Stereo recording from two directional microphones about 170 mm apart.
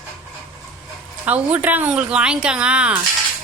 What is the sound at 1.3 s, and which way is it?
Speech, 10° right (ahead or behind).